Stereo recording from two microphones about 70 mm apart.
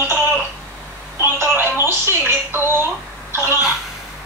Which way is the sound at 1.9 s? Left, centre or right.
Right.